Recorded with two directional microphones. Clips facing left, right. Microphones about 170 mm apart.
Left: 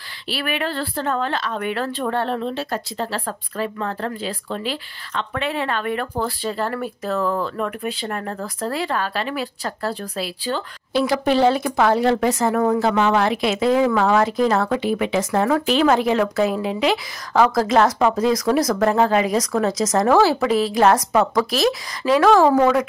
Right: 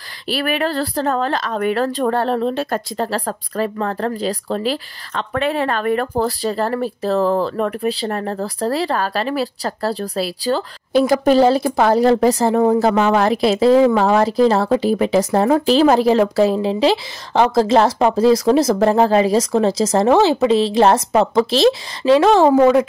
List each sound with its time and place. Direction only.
0.3 s speech: 40° right (ahead or behind); by 22.8 s 20° right (ahead or behind)